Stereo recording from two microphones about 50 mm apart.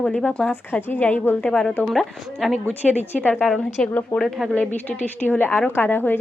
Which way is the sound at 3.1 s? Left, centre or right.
Left.